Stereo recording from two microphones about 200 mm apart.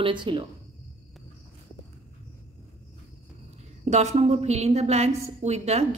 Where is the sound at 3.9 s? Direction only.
35° right (ahead or behind).